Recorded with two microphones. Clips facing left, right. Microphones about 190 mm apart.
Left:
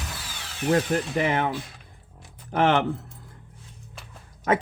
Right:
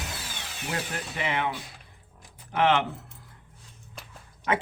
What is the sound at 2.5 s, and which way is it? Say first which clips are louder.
Speech: left 2 dB; 45° left (ahead or behind).